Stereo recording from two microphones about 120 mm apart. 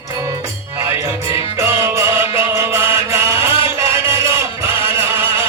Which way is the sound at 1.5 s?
25° right (ahead or behind).